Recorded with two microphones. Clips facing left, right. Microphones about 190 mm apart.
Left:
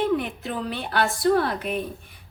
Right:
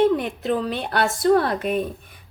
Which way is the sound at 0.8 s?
45° right (ahead or behind).